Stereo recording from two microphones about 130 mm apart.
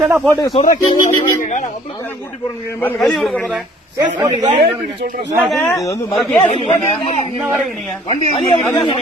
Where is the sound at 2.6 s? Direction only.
15° left (ahead or behind).